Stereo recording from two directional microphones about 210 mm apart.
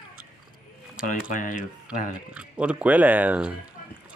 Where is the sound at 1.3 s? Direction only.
40° left (ahead or behind).